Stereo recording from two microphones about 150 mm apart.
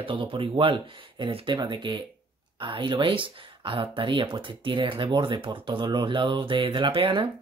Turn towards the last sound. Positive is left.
turn(degrees=-35)  # may be behind; listen again after turning